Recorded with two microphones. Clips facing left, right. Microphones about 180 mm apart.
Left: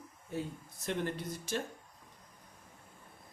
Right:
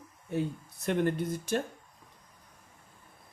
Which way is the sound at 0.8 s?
55° right (ahead or behind).